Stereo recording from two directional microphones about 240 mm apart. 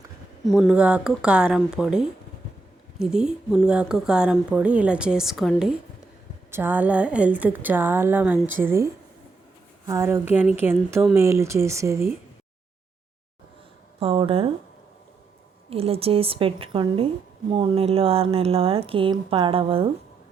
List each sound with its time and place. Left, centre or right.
0.4 s a woman's voice: centre
14.0 s speech: right
15.7 s speech: right